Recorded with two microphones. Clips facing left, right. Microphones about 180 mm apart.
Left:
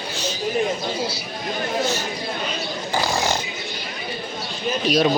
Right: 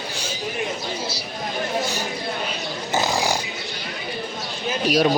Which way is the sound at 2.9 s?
15° right (ahead or behind).